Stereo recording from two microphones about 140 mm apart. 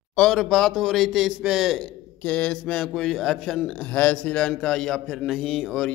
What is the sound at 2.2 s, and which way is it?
A man's voice, 10° left (ahead or behind).